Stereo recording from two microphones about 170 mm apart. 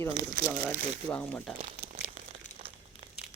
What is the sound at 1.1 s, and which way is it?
Speech, 5° left (ahead or behind).